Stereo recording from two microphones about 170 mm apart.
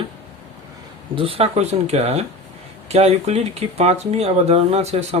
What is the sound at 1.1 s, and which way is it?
Speech, 30° right (ahead or behind).